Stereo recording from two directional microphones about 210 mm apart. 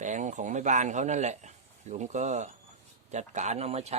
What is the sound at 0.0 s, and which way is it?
Speech, 35° right (ahead or behind).